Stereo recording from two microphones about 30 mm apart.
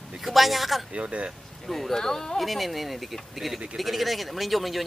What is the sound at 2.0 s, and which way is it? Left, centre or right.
Speech, centre.